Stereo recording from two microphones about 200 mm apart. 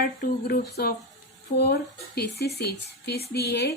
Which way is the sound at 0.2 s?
50° left (ahead or behind).